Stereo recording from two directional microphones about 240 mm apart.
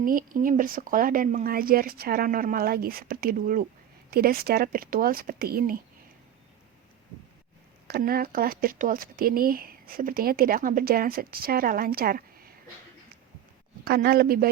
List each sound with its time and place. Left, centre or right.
0.0 s speech: right
7.9 s speech: right
13.8 s speech: right